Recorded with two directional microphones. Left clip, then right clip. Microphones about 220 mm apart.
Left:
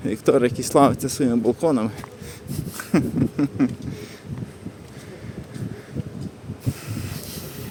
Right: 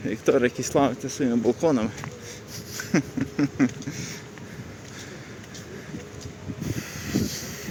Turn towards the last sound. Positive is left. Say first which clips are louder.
# even
turn(degrees=15)  # may be behind; listen again after turning